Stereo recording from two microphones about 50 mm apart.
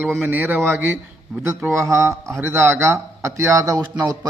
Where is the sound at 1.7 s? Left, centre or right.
Right.